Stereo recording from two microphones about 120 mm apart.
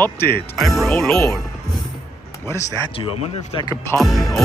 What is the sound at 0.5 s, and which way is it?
Speech, centre (ahead or behind).